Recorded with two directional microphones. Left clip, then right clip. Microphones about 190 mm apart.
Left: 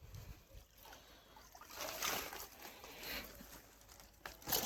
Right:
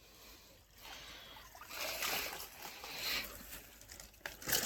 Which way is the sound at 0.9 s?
25° left (ahead or behind).